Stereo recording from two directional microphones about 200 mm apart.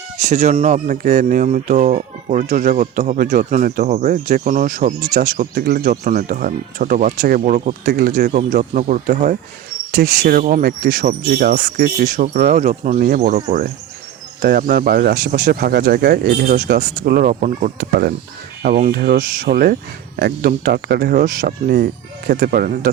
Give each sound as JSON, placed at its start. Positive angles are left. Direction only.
{"t": 0.3, "sound": "speech", "side_deg": -35}
{"t": 7.9, "sound": "speech", "side_deg": -50}